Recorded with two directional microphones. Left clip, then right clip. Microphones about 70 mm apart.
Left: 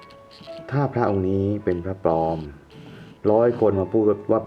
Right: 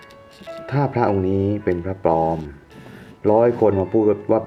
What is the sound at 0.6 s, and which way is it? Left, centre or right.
Speech, centre.